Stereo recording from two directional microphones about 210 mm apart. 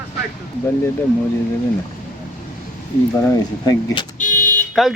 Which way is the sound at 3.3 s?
15° left (ahead or behind).